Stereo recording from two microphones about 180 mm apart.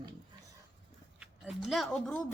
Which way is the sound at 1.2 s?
Centre (ahead or behind).